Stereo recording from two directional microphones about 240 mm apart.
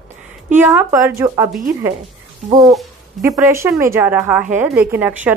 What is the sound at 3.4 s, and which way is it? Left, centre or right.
A woman's voice, centre.